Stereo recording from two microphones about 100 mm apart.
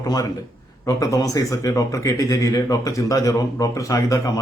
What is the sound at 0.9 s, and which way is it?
A man's voice, 35° left (ahead or behind).